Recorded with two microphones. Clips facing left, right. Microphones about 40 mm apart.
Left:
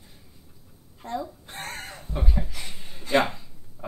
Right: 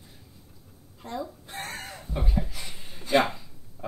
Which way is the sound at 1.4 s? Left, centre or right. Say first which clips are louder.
Even; centre.